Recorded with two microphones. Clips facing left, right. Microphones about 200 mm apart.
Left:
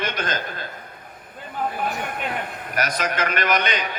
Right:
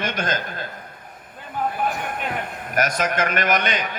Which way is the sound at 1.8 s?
45° right (ahead or behind).